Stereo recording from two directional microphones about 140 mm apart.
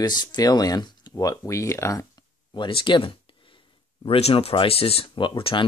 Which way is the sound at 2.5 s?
35° left (ahead or behind).